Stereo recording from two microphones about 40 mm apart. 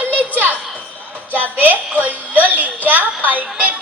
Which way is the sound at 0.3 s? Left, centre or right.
Right.